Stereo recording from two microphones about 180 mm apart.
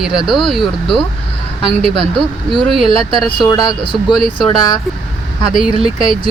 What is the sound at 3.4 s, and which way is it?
Speech, 25° left (ahead or behind).